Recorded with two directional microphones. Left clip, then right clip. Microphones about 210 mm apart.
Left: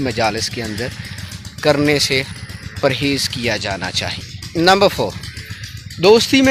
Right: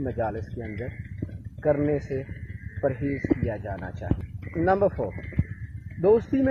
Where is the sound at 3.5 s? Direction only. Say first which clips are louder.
Left 13 dB; 20° left (ahead or behind).